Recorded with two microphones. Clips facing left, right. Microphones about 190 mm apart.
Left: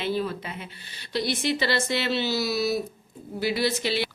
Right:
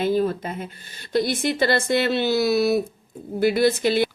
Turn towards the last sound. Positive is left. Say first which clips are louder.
# right 7 dB
turn(degrees=-50)  # may be behind; listen again after turning